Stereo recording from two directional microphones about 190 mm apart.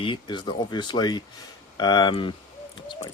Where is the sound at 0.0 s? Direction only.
25° left (ahead or behind).